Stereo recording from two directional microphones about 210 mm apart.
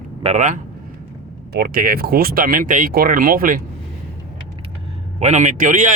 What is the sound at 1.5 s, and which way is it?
Speech, 45° right (ahead or behind).